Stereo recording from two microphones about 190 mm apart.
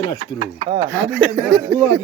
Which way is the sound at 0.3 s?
30° right (ahead or behind).